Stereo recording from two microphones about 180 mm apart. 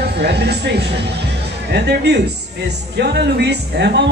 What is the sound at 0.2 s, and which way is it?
Speech, 65° right (ahead or behind).